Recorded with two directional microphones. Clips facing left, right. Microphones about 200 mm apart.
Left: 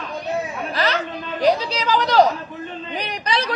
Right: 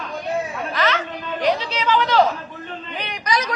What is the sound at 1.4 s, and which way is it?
Speech, 40° left (ahead or behind).